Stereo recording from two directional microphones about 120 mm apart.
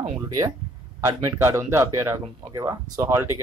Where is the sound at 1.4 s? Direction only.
25° right (ahead or behind).